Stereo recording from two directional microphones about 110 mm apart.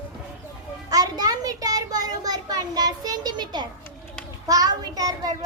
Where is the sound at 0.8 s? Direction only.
35° right (ahead or behind).